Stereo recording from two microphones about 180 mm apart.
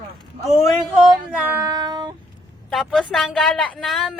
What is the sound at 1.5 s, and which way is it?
Child singing, 20° right (ahead or behind).